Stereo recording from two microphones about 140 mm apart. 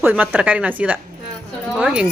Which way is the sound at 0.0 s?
10° right (ahead or behind).